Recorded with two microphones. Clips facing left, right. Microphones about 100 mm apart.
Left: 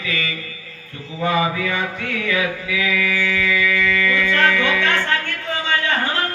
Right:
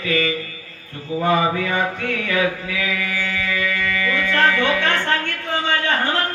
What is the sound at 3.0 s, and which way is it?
Music, 35° right (ahead or behind).